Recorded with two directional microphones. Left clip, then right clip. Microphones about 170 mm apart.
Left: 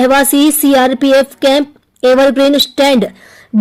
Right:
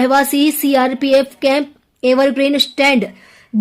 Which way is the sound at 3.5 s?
40° left (ahead or behind).